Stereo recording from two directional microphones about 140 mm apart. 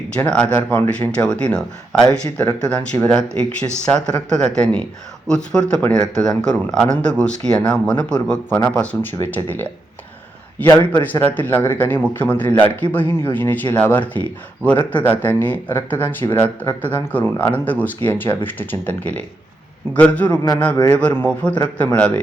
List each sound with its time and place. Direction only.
0.2 s a man's voice: 10° left (ahead or behind)
20.3 s speech: 25° left (ahead or behind)
20.8 s a man's voice: 10° left (ahead or behind)